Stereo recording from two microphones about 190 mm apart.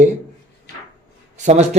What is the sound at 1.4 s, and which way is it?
Speech, 40° right (ahead or behind).